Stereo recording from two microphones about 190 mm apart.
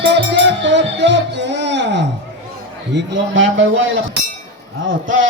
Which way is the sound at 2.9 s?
70° right (ahead or behind).